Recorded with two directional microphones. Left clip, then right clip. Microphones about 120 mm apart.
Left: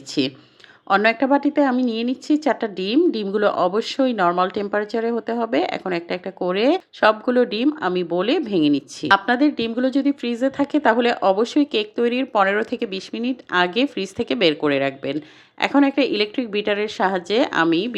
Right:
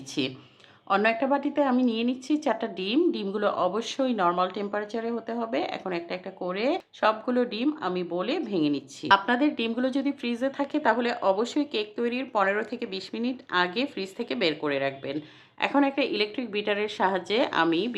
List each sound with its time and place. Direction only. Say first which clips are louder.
0.1 s a woman's voice: left 7 dB; 35° left (ahead or behind)